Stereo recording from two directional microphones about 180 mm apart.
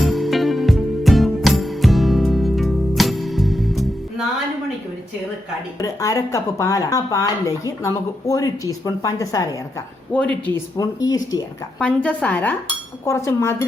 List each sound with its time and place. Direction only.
0.0 s music: centre (ahead or behind)
5.8 s speech: 20° left (ahead or behind)
10.1 s speech: 5° left (ahead or behind)
10.5 s speech: 20° left (ahead or behind)
11.8 s speech: 5° left (ahead or behind)